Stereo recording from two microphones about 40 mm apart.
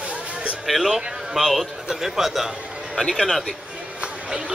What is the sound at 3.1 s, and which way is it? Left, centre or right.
Speech, centre.